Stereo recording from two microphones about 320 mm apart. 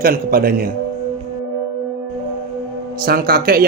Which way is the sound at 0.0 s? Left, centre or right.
Right.